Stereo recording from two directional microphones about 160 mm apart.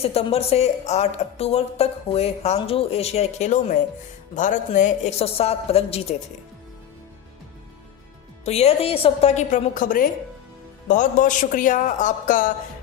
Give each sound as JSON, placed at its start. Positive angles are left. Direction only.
{"t": 0.0, "sound": "a woman's voice", "side_deg": 40}
{"t": 8.4, "sound": "a woman's voice", "side_deg": 40}